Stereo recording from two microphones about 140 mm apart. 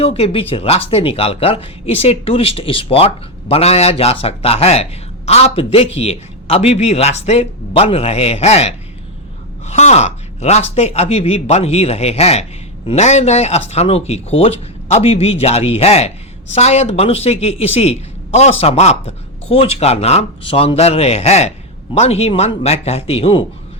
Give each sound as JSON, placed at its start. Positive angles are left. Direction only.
{"t": 0.0, "sound": "speech", "side_deg": 45}